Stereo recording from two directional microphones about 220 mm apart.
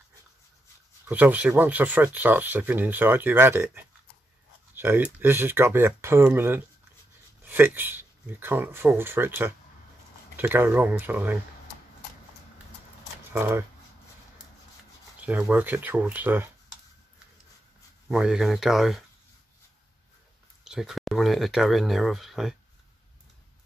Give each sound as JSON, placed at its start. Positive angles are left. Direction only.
{"t": 1.0, "sound": "speech", "side_deg": -10}
{"t": 13.3, "sound": "speech", "side_deg": -10}
{"t": 15.1, "sound": "speech", "side_deg": -5}
{"t": 18.0, "sound": "speech", "side_deg": -5}
{"t": 20.6, "sound": "speech", "side_deg": 0}